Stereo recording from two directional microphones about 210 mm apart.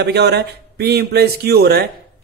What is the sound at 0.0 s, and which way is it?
Speech, 50° right (ahead or behind).